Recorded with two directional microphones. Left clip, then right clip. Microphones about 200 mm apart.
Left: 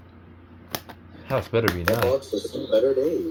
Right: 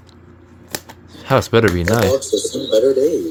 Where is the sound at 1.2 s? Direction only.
50° right (ahead or behind).